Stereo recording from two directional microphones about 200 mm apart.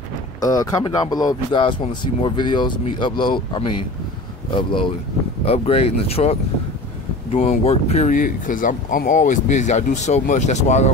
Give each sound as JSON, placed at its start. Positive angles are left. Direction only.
{"t": 0.4, "sound": "speech", "side_deg": 20}
{"t": 7.3, "sound": "speech", "side_deg": 30}